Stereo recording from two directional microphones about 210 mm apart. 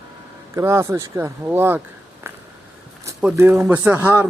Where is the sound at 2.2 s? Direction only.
10° right (ahead or behind).